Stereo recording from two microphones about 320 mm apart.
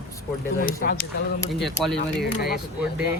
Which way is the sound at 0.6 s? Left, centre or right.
Left.